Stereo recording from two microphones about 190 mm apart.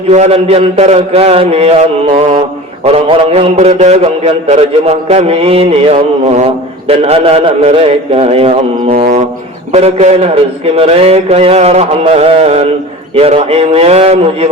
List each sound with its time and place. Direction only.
0.1 s mantra: 35° right (ahead or behind)
9.7 s mantra: 35° right (ahead or behind)